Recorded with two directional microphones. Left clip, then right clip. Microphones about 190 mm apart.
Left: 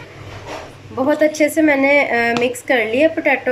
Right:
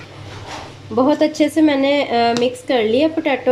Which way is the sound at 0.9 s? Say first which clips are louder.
Even; 30° right (ahead or behind).